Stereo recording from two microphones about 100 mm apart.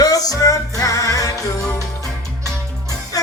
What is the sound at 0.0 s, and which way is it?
Music, 35° left (ahead or behind).